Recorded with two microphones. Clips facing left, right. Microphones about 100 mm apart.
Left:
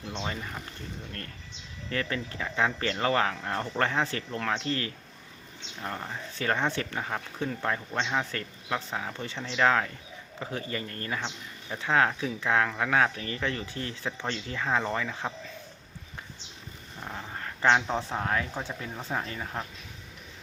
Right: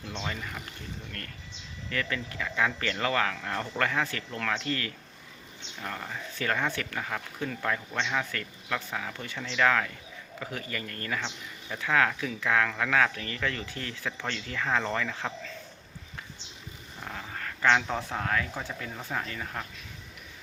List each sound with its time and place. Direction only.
0.2 s speech: 25° left (ahead or behind)
1.9 s speech: 30° left (ahead or behind)
17.0 s speech: 15° left (ahead or behind)